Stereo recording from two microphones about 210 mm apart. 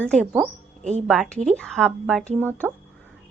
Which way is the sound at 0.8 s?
30° right (ahead or behind).